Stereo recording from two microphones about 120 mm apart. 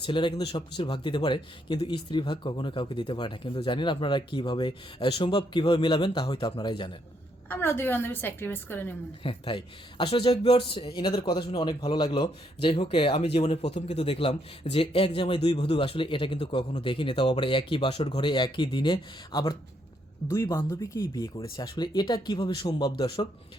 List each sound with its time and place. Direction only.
0.0 s speech: 40° left (ahead or behind)
7.5 s a woman's voice: 20° left (ahead or behind)
9.2 s a man's voice: 50° left (ahead or behind)
20.2 s speech: 25° left (ahead or behind)